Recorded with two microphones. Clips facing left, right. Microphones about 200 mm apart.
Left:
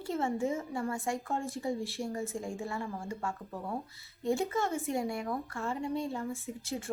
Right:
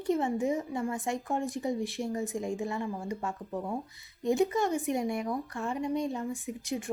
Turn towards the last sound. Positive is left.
turn(degrees=-15)  # may be behind; listen again after turning